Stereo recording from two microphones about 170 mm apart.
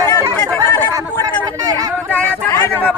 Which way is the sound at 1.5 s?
20° right (ahead or behind).